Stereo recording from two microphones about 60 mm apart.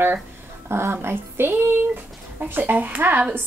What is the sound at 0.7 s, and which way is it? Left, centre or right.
A woman's voice, right.